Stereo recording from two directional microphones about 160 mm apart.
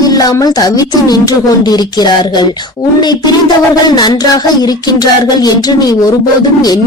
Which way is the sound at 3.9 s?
25° left (ahead or behind).